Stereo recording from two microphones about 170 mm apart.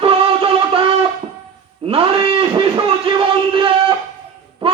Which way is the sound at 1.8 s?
30° right (ahead or behind).